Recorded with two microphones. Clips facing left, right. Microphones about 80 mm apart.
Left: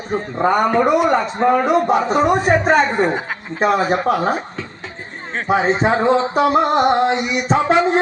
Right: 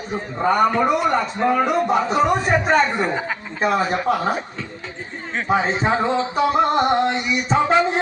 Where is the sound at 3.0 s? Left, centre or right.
Left.